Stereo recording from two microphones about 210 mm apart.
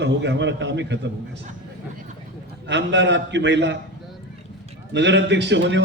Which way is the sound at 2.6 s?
60° right (ahead or behind).